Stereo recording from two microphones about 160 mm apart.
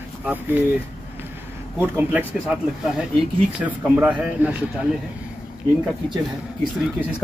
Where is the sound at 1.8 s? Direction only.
10° right (ahead or behind).